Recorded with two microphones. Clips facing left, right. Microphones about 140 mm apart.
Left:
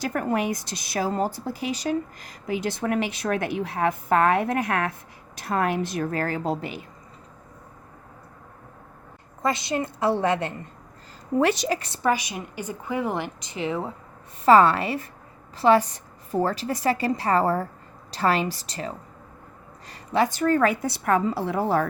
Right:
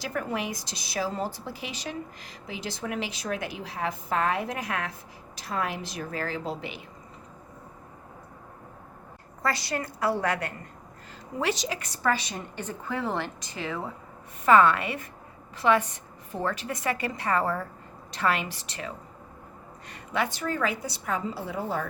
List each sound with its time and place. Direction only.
0.0 s a woman's voice: 50° left (ahead or behind)
9.4 s a woman's voice: 20° left (ahead or behind)
11.3 s a woman's voice: 55° left (ahead or behind)
11.8 s a woman's voice: 25° left (ahead or behind)
12.1 s a woman's voice: 10° left (ahead or behind)
14.4 s a woman's voice: 35° left (ahead or behind); by 21.8 s 70° left (ahead or behind)